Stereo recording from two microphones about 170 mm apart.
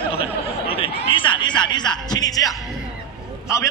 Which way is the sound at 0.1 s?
35° left (ahead or behind).